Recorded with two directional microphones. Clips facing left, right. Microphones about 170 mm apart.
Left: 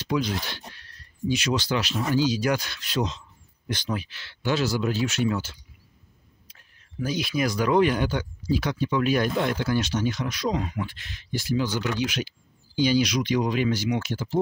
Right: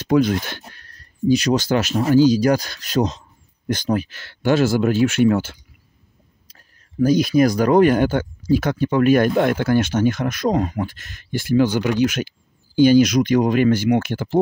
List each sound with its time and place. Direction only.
0.0 s speech: 50° right (ahead or behind)
6.4 s speech: 40° right (ahead or behind); by 14.4 s 60° right (ahead or behind)